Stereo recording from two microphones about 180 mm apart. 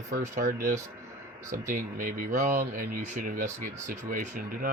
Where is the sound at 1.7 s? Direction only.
45° right (ahead or behind).